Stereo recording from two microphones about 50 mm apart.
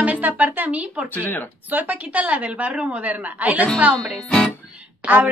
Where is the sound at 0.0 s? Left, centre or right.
Right.